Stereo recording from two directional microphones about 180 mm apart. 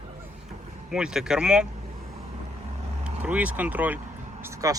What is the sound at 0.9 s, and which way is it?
Speech, 5° right (ahead or behind).